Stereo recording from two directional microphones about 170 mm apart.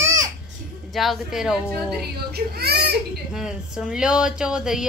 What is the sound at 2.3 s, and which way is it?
Speech, 70° right (ahead or behind).